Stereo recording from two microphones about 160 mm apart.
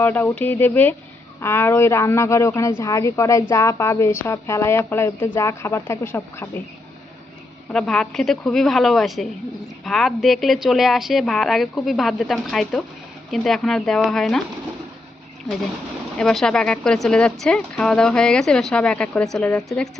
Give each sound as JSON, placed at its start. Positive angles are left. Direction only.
{"t": 0.0, "sound": "speech", "side_deg": 10}
{"t": 7.7, "sound": "speech", "side_deg": 5}
{"t": 16.1, "sound": "speech", "side_deg": 5}